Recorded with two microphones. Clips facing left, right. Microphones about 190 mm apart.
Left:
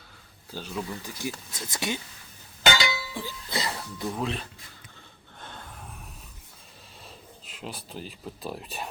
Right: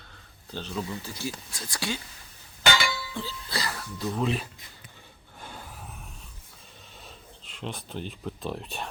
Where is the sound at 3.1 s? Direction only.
15° left (ahead or behind).